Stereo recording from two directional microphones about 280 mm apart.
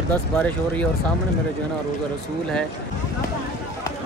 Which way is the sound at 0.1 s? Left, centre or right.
Centre.